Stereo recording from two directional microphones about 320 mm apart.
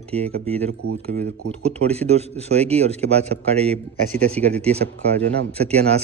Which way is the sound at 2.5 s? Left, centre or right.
Centre.